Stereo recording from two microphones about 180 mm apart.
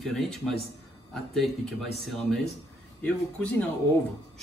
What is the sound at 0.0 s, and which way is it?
A man's voice, centre (ahead or behind).